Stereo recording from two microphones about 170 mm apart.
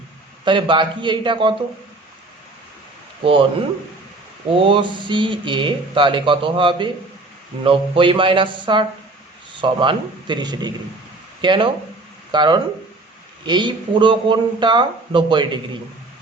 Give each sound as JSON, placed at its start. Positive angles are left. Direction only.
{"t": 0.4, "sound": "speech", "side_deg": -30}
{"t": 4.5, "sound": "speech", "side_deg": -30}